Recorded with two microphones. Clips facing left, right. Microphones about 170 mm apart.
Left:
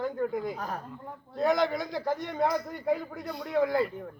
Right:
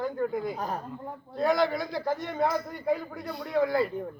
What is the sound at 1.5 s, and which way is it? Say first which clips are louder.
Speech: right 3 dB; 20° left (ahead or behind).